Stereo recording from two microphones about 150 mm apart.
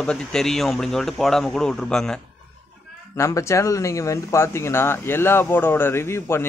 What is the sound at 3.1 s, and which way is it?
Speech, 20° left (ahead or behind).